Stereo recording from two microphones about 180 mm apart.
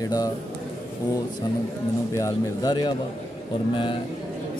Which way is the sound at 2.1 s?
20° left (ahead or behind).